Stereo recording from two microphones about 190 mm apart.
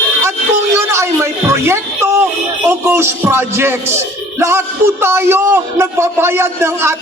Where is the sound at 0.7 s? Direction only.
15° right (ahead or behind).